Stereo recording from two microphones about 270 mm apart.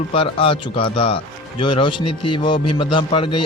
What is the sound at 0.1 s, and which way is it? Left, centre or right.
A man's voice, centre.